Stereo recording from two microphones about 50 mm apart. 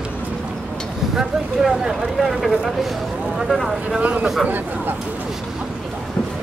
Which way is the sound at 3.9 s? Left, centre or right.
Right.